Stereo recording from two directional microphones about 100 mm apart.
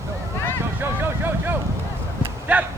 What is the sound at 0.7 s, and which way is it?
Vehicle, 20° right (ahead or behind).